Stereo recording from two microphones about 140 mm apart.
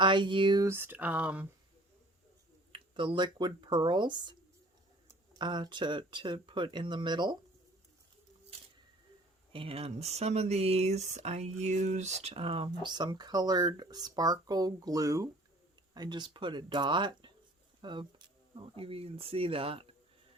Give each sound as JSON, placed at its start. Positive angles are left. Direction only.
{"t": 0.0, "sound": "speech", "side_deg": -35}
{"t": 0.7, "sound": "speech", "side_deg": -15}
{"t": 2.7, "sound": "speech", "side_deg": -35}
{"t": 5.4, "sound": "speech", "side_deg": -30}
{"t": 9.5, "sound": "speech", "side_deg": -40}